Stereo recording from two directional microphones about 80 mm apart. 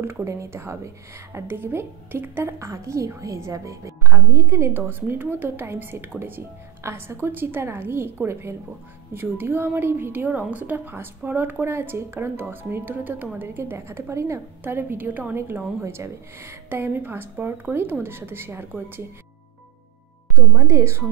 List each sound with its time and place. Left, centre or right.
0.0 s a woman's voice: right
20.3 s a woman's voice: right